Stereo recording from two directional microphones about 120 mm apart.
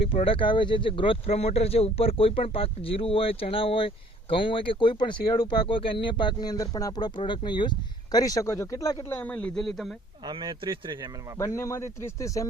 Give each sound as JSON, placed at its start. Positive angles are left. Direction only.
{"t": 0.3, "sound": "speech", "side_deg": 45}
{"t": 9.2, "sound": "a man's voice", "side_deg": 10}
{"t": 10.2, "sound": "speech", "side_deg": -40}
{"t": 11.3, "sound": "speech", "side_deg": 25}